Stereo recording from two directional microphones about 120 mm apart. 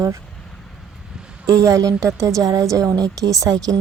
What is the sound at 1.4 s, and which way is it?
A woman's voice, 30° right (ahead or behind).